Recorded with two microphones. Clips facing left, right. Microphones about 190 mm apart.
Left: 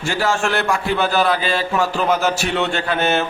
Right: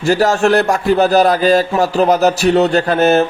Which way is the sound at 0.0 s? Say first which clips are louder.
Right 7 dB; 40° right (ahead or behind).